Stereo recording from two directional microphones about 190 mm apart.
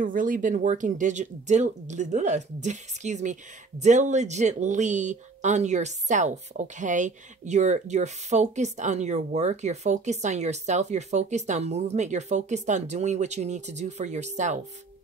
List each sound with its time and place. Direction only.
0.0 s speech: 45° right (ahead or behind)